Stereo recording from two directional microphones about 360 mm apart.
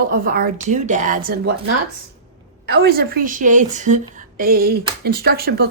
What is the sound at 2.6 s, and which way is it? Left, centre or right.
A woman's voice, right.